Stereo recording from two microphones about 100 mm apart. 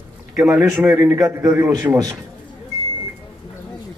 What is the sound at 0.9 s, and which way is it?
Speech, 30° right (ahead or behind).